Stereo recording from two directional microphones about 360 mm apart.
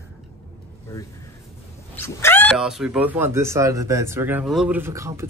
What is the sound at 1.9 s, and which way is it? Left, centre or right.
Speech, centre.